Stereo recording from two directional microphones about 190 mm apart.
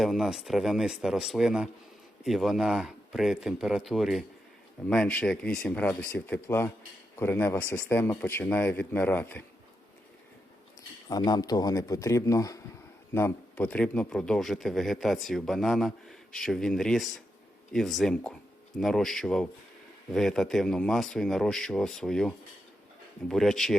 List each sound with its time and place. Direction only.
0.0 s speech: centre (ahead or behind)
11.1 s speech: 20° left (ahead or behind); by 23.7 s centre (ahead or behind)